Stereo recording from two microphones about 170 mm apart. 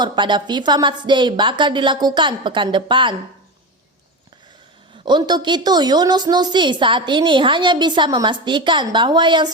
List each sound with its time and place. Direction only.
0.0 s a woman's voice: 25° right (ahead or behind)
5.0 s a woman's voice: 25° right (ahead or behind)